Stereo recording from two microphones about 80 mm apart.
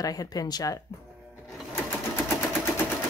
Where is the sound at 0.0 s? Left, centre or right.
Left.